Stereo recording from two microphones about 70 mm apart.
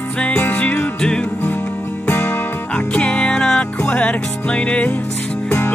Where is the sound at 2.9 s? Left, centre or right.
Centre.